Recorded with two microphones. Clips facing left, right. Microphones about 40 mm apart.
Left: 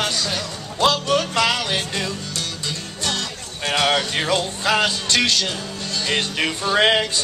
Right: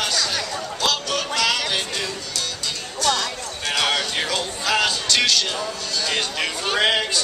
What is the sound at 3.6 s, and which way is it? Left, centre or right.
Speech, centre.